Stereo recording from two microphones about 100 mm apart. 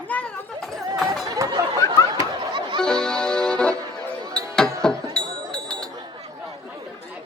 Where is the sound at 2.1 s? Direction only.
50° right (ahead or behind).